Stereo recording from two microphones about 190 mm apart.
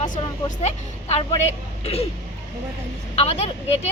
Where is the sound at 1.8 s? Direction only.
30° left (ahead or behind).